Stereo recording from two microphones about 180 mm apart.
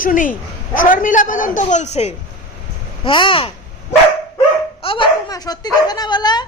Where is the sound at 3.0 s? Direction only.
30° left (ahead or behind).